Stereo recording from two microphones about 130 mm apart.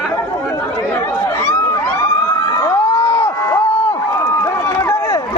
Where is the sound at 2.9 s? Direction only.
50° left (ahead or behind).